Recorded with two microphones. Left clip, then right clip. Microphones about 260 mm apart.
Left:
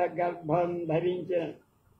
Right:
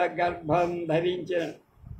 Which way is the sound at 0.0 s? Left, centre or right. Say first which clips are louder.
Right 3 dB; right.